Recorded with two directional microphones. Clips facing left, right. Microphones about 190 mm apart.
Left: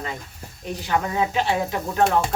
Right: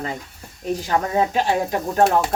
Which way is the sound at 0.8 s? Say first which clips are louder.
Right 2 dB; 40° right (ahead or behind).